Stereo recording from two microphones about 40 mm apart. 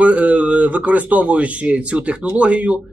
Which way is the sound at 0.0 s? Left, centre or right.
Right.